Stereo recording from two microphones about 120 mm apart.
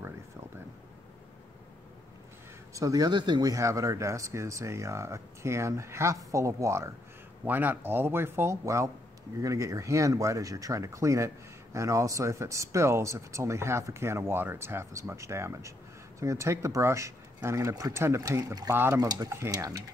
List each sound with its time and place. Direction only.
2.7 s speech: 30° right (ahead or behind)
7.4 s speech: 15° right (ahead or behind)
18.9 s speech: 30° right (ahead or behind)